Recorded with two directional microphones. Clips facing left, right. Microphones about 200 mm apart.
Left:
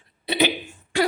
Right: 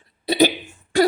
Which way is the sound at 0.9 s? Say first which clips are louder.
Right 5 dB; 40° right (ahead or behind).